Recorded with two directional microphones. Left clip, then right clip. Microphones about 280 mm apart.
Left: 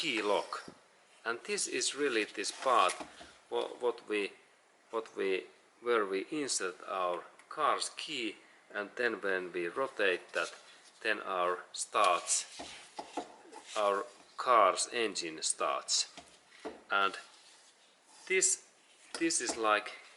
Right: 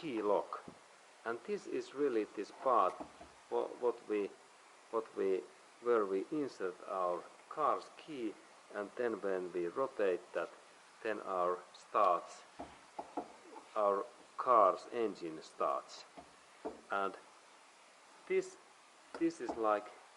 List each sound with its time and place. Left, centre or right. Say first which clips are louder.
0.0 s speech: left 3 dB; centre
3.5 s speech: left 2 dB; right
5.1 s speech: left 3 dB; centre
12.5 s a sound: left 3 dB; right
13.7 s a sound: left 2 dB; centre
14.4 s speech: left 3 dB; centre
18.3 s speech: left 5 dB; centre